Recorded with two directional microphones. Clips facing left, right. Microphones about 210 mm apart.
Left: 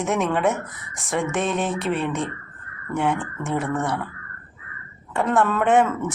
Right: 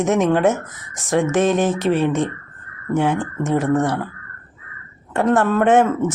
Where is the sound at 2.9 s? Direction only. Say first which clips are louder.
Right 5 dB; 30° right (ahead or behind).